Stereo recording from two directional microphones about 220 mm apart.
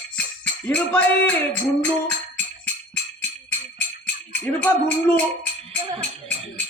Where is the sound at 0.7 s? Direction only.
5° left (ahead or behind).